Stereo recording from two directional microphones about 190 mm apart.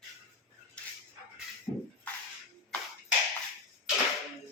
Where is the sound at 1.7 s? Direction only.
15° right (ahead or behind).